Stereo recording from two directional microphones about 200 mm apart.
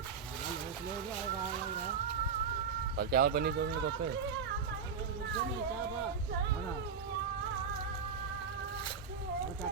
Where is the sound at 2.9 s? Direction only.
50° right (ahead or behind).